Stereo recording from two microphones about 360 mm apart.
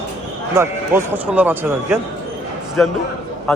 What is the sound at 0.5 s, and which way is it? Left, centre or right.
A man's voice, centre.